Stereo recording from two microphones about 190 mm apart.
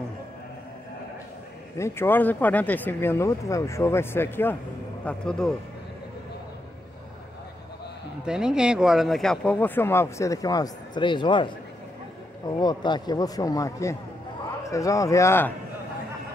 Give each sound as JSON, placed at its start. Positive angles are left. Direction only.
{"t": 1.8, "sound": "speech", "side_deg": 10}
{"t": 8.3, "sound": "a man's voice", "side_deg": -5}